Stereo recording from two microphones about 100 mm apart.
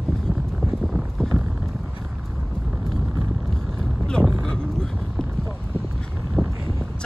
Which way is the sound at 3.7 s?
5° left (ahead or behind).